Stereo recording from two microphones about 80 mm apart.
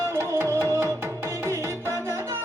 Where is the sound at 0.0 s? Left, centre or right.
Right.